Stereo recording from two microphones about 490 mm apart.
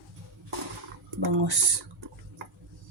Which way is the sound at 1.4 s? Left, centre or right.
Right.